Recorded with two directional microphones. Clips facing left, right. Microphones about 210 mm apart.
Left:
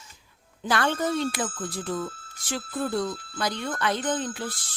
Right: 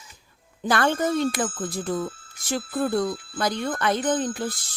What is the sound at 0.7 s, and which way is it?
Speech, 45° right (ahead or behind).